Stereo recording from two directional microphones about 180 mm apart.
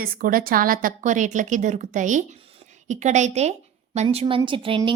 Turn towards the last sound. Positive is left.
turn(degrees=-30)  # may be behind; listen again after turning